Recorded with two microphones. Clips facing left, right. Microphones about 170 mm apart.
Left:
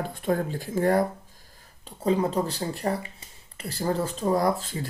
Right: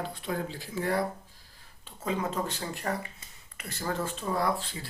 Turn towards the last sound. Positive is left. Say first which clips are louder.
# left 6 dB
turn(degrees=40)  # may be behind; listen again after turning